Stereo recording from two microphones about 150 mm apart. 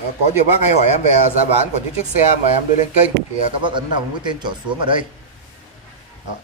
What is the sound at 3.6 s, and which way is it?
A man's voice, 30° right (ahead or behind).